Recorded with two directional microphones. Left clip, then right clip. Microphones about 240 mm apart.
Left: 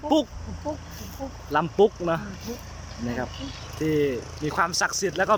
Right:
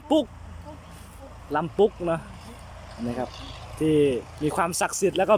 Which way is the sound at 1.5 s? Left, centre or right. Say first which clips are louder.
Left 2 dB; centre.